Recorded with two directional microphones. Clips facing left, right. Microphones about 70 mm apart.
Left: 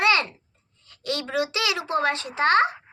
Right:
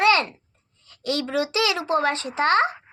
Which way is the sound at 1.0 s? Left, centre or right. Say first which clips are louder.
Right 3 dB; left.